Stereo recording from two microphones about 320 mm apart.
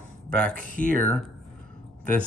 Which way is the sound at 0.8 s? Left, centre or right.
Right.